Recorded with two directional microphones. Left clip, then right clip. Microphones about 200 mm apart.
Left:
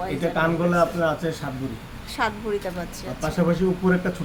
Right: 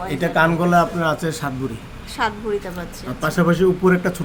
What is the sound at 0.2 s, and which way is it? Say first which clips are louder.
Speech: right 6 dB; 60° right (ahead or behind).